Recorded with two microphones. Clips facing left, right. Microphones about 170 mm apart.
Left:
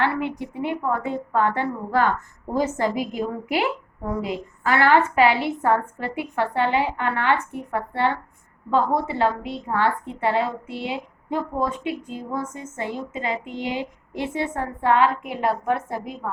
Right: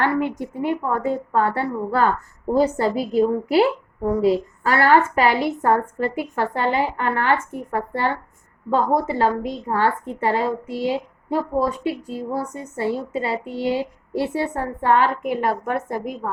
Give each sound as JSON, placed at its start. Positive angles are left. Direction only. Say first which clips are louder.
{"t": 0.0, "sound": "a woman's voice", "louder": "right 3 dB", "side_deg": -45}